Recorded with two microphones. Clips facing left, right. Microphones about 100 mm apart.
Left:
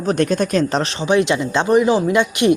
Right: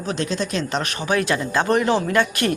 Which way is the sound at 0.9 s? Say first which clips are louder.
Left 3 dB; 20° left (ahead or behind).